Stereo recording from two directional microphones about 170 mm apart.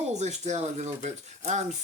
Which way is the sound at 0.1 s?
40° right (ahead or behind).